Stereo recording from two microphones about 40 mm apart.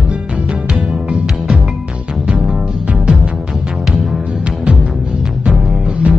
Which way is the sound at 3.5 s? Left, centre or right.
Centre.